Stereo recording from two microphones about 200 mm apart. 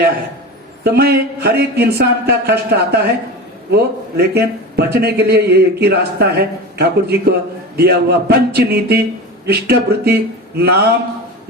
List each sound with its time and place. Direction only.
0.9 s a man's voice: 50° right (ahead or behind)